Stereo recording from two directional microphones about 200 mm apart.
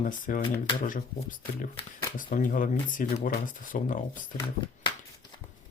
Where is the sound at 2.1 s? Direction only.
40° left (ahead or behind).